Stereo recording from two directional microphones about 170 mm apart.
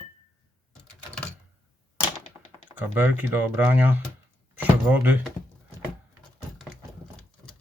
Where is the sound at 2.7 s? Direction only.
10° right (ahead or behind).